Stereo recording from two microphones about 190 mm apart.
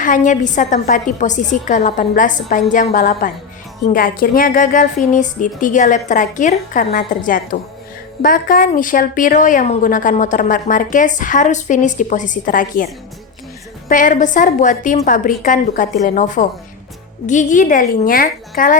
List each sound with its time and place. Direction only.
0.0 s a woman's voice: 40° left (ahead or behind)